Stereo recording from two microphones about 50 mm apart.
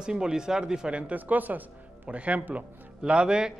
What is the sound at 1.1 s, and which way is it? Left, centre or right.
A man's voice, right.